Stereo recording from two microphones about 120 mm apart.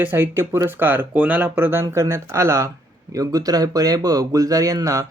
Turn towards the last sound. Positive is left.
turn(degrees=-30)  # may be behind; listen again after turning